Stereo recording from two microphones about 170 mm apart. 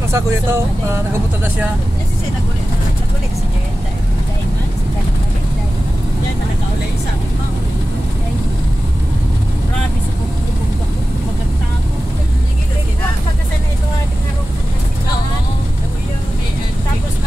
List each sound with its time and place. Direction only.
0.1 s speech: 15° right (ahead or behind)